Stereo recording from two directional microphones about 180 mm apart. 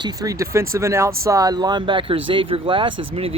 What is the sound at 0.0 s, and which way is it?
Speech, 20° right (ahead or behind).